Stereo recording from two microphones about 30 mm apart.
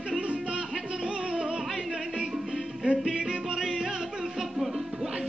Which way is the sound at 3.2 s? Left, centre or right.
Centre.